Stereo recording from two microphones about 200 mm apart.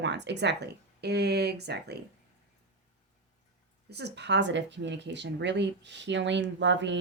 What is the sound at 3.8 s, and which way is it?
Speech, 55° right (ahead or behind).